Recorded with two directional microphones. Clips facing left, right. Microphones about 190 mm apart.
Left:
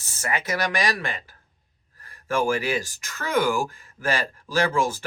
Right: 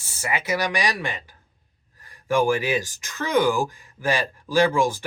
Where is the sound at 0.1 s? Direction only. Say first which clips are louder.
Right 2 dB; 10° right (ahead or behind).